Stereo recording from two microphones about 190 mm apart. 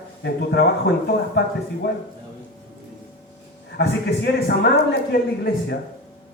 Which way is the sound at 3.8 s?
65° left (ahead or behind).